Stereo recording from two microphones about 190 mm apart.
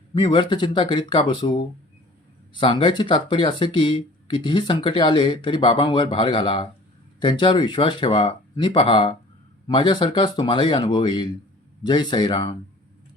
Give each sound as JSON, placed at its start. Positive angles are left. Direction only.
{"t": 0.1, "sound": "speech", "side_deg": 25}